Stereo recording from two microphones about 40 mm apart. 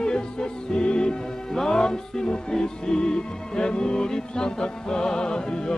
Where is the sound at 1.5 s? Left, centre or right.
Centre.